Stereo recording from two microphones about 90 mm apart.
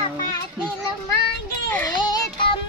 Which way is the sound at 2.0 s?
65° left (ahead or behind).